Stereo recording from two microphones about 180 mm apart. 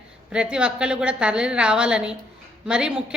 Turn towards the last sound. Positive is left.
turn(degrees=-5)  # may be behind; listen again after turning